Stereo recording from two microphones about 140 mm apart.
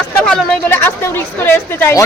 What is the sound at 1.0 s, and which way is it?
Speech, 15° left (ahead or behind).